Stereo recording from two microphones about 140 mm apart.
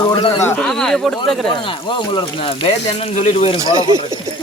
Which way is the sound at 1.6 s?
35° left (ahead or behind).